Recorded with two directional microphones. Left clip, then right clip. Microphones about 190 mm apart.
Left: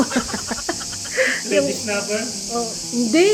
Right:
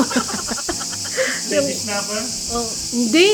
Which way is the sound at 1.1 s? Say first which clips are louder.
Left 2 dB; centre (ahead or behind).